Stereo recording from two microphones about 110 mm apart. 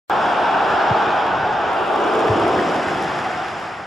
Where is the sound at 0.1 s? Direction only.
Centre (ahead or behind).